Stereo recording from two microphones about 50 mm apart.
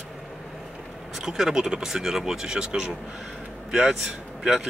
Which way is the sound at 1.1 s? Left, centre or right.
Centre.